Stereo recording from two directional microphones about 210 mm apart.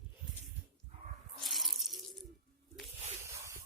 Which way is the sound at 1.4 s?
Centre (ahead or behind).